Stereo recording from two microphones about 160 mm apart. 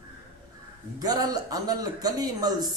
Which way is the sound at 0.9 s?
25° right (ahead or behind).